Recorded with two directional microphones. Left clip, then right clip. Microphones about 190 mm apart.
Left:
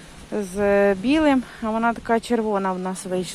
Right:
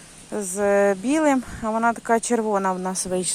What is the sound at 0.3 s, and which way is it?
Speech, 15° right (ahead or behind).